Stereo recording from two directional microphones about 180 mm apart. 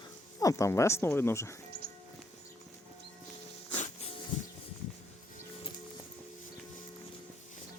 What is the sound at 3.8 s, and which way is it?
Music, 45° left (ahead or behind).